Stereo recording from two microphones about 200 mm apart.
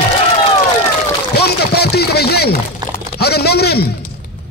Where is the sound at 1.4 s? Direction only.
55° left (ahead or behind).